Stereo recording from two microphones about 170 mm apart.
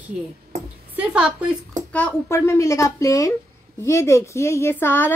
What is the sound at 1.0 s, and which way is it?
Speech, 5° right (ahead or behind).